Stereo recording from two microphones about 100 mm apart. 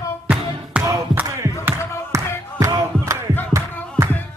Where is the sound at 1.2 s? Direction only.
35° right (ahead or behind).